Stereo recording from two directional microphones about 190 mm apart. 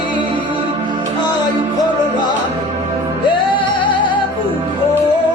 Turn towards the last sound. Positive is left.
turn(degrees=25)  # may be behind; listen again after turning